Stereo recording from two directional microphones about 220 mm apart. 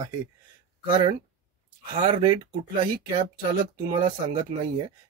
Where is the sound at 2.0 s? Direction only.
20° right (ahead or behind).